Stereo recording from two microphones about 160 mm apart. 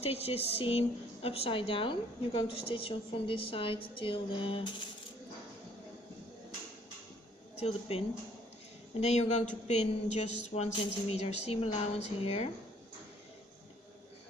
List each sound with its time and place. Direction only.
0.0 s a woman's voice: 40° left (ahead or behind)
7.5 s a woman's voice: 40° left (ahead or behind)